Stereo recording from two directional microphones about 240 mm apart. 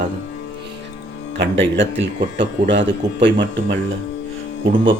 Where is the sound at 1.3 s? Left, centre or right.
Right.